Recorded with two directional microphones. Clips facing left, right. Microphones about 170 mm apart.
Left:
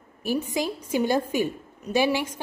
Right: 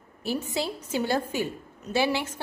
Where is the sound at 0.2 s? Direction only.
15° left (ahead or behind).